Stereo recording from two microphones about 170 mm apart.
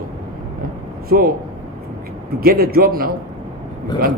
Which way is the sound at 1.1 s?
60° right (ahead or behind).